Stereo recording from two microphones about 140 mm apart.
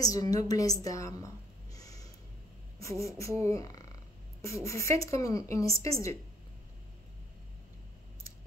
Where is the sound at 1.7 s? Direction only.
25° left (ahead or behind).